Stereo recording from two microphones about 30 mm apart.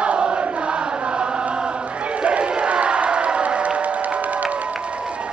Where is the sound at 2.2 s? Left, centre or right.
Right.